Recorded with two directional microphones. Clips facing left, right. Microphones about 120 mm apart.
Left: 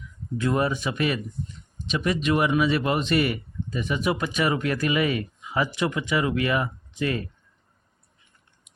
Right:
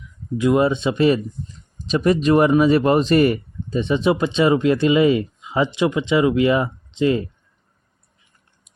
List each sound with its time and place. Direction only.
0.3 s speech: 20° right (ahead or behind)